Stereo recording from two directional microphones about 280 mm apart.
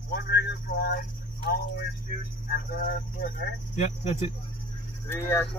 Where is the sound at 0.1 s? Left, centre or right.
Left.